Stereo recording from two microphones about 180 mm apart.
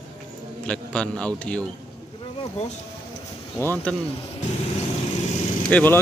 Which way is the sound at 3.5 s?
10° left (ahead or behind).